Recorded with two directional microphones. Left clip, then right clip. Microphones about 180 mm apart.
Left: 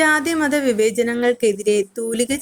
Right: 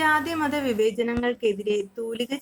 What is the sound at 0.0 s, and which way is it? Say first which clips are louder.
A woman's voice: left 5 dB; 35° left (ahead or behind).